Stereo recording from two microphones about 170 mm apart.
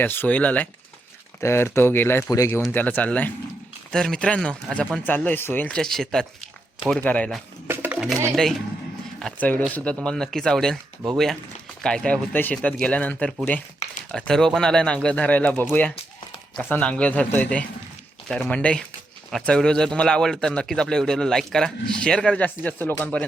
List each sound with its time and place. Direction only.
0.0 s a man's voice: 10° left (ahead or behind)
7.7 s music: 10° right (ahead or behind)
8.4 s a man's voice: centre (ahead or behind)
11.8 s a man's voice: 5° left (ahead or behind)